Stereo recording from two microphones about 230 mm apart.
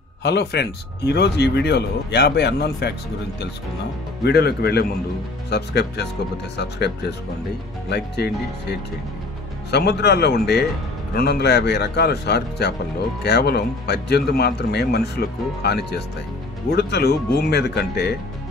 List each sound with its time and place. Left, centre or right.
0.2 s speech: left
4.2 s speech: left